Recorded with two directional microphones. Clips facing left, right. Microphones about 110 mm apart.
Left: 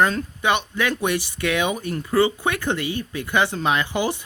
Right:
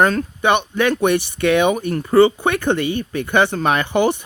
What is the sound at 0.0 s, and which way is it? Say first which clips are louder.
Speech: right 4 dB; 55° right (ahead or behind).